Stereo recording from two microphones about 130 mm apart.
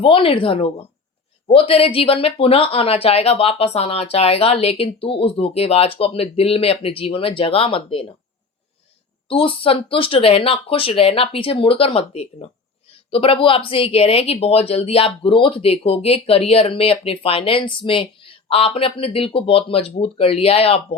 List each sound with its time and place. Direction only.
0.0 s speech: 45° left (ahead or behind)
9.3 s speech: 45° left (ahead or behind)